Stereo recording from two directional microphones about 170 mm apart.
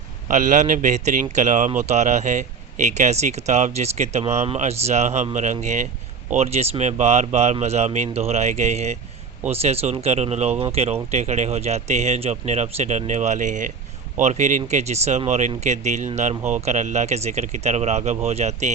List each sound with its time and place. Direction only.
0.3 s speech: 50° right (ahead or behind)